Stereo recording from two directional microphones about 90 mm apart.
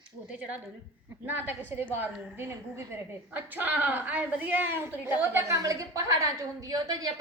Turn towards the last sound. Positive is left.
turn(degrees=-50)  # may be behind; listen again after turning